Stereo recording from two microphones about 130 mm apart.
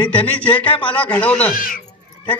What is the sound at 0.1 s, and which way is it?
A man's voice, 10° left (ahead or behind).